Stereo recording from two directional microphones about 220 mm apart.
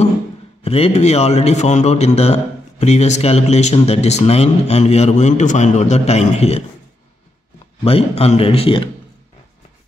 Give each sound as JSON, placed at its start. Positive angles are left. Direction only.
{"t": 0.7, "sound": "a man's voice", "side_deg": 25}
{"t": 7.8, "sound": "a man's voice", "side_deg": 25}